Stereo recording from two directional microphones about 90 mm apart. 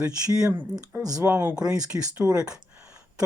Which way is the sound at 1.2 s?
25° right (ahead or behind).